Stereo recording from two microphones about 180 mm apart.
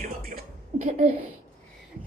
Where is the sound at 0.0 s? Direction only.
50° right (ahead or behind).